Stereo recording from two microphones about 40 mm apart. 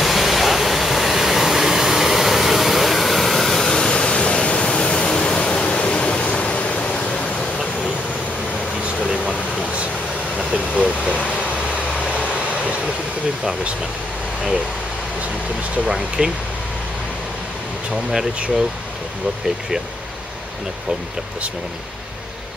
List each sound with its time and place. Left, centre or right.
0.0 s waterfall: centre
3.9 s pink noise: left
10.3 s vehicle: right
13.4 s speech: right
16.2 s speech: right